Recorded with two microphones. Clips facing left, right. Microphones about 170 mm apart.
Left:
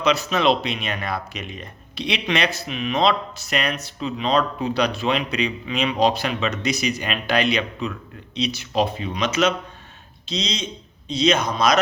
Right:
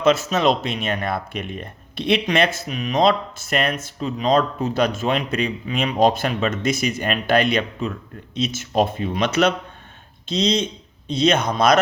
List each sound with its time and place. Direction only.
0.0 s speech: 50° right (ahead or behind)